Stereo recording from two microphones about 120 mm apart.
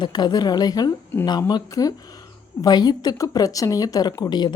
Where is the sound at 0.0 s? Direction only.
35° left (ahead or behind).